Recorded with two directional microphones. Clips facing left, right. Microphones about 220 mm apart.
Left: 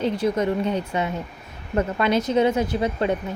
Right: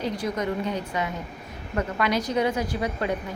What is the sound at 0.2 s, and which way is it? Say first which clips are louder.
A woman's voice: left 6 dB; 25° left (ahead or behind).